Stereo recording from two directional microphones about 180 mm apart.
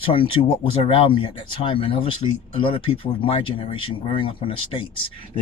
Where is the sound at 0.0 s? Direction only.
30° left (ahead or behind).